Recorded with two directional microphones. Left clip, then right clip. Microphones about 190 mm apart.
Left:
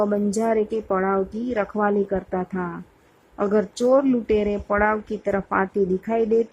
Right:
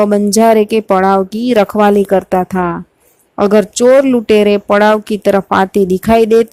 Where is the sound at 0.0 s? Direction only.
40° right (ahead or behind).